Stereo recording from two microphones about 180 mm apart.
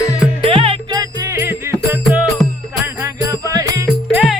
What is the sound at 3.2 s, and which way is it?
Music, 20° right (ahead or behind).